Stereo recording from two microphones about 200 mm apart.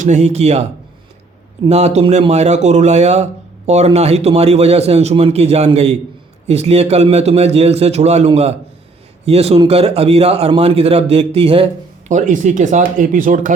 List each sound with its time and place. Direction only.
0.0 s a man's voice: 35° right (ahead or behind)
1.6 s a man's voice: 35° right (ahead or behind)